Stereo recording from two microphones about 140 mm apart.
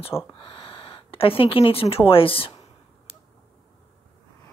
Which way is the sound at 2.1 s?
40° left (ahead or behind).